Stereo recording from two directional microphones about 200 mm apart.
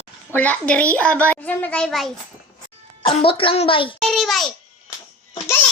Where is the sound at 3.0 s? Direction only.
25° left (ahead or behind).